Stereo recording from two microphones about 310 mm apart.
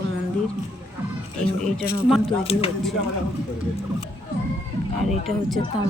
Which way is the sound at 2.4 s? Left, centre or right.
Centre.